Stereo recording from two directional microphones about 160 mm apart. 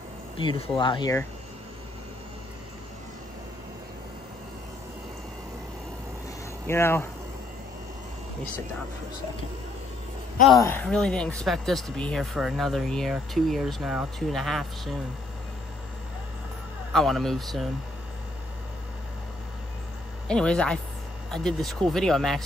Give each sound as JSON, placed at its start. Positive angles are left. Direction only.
{"t": 0.4, "sound": "speech", "side_deg": 30}
{"t": 6.7, "sound": "speech", "side_deg": 15}
{"t": 10.6, "sound": "speech", "side_deg": 10}
{"t": 16.9, "sound": "speech", "side_deg": 0}
{"t": 20.2, "sound": "speech", "side_deg": 5}